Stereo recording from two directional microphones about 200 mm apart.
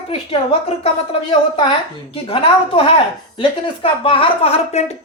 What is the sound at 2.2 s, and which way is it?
Speech, 25° left (ahead or behind).